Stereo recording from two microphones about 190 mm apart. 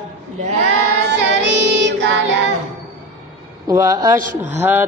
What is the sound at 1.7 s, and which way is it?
Child singing, 65° right (ahead or behind).